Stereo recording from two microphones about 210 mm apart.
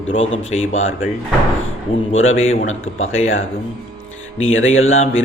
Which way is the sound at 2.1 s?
70° left (ahead or behind).